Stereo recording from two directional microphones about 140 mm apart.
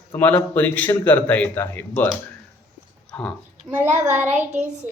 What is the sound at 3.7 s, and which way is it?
Speech, 15° right (ahead or behind).